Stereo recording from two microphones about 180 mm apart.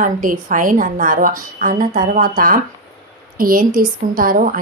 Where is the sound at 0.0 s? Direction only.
45° right (ahead or behind).